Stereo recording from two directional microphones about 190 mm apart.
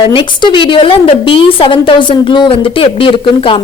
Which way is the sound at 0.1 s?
25° left (ahead or behind).